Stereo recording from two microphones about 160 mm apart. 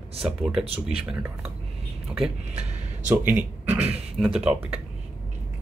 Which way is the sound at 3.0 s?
10° right (ahead or behind).